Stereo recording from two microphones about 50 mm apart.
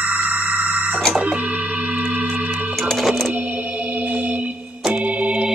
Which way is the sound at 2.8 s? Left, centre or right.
Centre.